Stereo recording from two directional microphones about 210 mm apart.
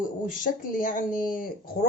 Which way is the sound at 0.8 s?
40° left (ahead or behind).